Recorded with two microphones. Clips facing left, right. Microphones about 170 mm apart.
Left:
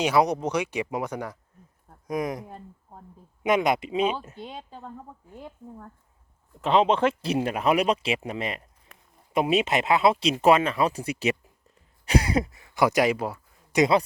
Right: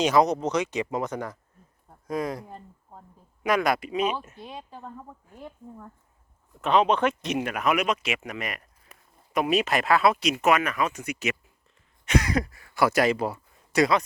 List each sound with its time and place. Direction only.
0.0 s speech: 10° left (ahead or behind)
3.4 s speech: 20° left (ahead or behind)
6.6 s speech: 25° left (ahead or behind)
8.9 s a sound: 5° right (ahead or behind)
9.3 s speech: 25° left (ahead or behind)
13.1 s speech: centre (ahead or behind)
13.7 s speech: 25° left (ahead or behind)